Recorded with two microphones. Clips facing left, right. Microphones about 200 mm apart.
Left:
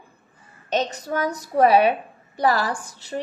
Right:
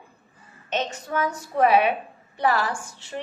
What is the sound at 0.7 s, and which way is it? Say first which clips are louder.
A woman's voice: left 3 dB; 40° left (ahead or behind).